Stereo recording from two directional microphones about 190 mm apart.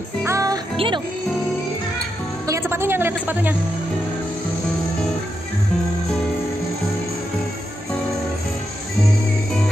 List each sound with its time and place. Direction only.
0.2 s music: 15° right (ahead or behind)
0.7 s speech: 25° right (ahead or behind)
2.4 s music: 15° right (ahead or behind)